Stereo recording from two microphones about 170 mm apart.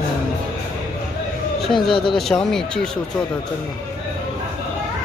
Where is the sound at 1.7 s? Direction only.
30° left (ahead or behind).